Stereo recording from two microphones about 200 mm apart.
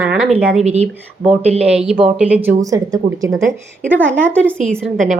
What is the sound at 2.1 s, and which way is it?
Speech, 5° right (ahead or behind).